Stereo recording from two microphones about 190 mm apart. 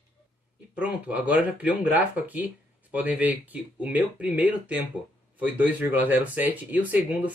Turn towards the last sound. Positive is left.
turn(degrees=-10)  # may be behind; listen again after turning